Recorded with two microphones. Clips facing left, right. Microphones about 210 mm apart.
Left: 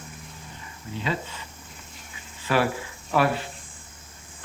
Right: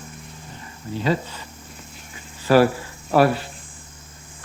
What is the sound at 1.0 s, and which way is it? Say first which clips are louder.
Speech: right 7 dB; 40° right (ahead or behind).